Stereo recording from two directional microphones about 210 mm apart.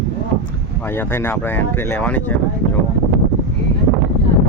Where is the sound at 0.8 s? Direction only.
10° left (ahead or behind).